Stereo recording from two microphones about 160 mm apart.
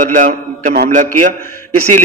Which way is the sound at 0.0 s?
50° right (ahead or behind).